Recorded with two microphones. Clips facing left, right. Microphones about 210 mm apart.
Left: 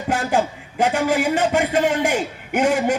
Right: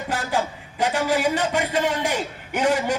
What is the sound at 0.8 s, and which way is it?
A man's voice, 50° left (ahead or behind).